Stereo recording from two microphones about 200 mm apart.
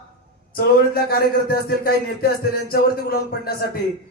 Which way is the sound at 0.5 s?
50° left (ahead or behind).